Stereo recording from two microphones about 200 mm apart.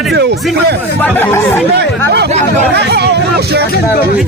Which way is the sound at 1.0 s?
10° left (ahead or behind).